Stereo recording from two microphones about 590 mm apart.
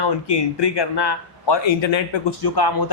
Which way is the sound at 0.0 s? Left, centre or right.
Left.